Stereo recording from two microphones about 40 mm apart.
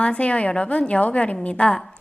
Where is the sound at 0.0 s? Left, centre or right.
Left.